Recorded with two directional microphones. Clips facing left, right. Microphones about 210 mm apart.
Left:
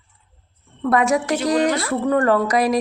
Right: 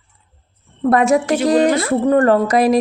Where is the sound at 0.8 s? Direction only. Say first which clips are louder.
Right 4 dB; 25° right (ahead or behind).